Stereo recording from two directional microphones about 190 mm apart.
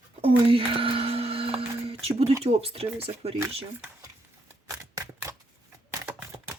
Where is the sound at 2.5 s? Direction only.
30° right (ahead or behind).